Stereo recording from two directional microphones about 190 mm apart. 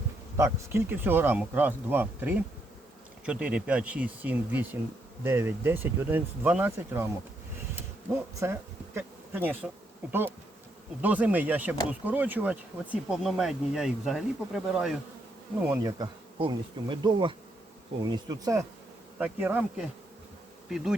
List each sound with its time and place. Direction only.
0.3 s speech: 15° right (ahead or behind)
9.0 s bee: 10° right (ahead or behind)
10.1 s speech: 10° right (ahead or behind)
15.6 s bee: 15° right (ahead or behind)
19.2 s speech: 10° right (ahead or behind)
20.7 s bee: centre (ahead or behind)